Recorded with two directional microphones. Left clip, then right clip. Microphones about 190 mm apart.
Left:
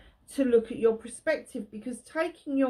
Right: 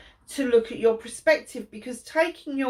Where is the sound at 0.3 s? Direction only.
50° left (ahead or behind).